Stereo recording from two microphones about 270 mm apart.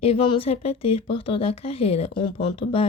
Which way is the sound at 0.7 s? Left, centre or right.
Left.